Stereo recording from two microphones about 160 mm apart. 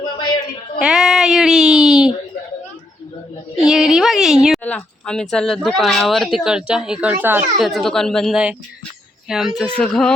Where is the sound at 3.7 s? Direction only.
Centre (ahead or behind).